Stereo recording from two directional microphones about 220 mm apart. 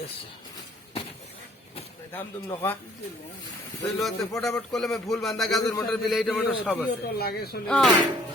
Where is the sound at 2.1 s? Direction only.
10° left (ahead or behind).